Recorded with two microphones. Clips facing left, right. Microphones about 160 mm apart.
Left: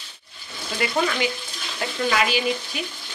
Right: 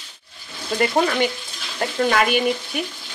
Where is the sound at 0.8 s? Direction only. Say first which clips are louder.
Right 4 dB; 45° right (ahead or behind).